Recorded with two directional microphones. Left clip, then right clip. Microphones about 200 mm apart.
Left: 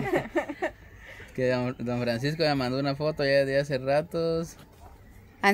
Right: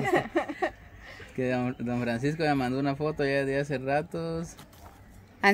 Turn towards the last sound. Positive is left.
turn(degrees=0)  # may be behind; listen again after turning